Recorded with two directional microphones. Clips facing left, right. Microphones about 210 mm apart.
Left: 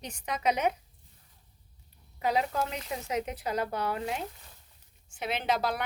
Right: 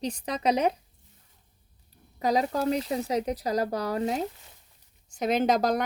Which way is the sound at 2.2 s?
40° right (ahead or behind).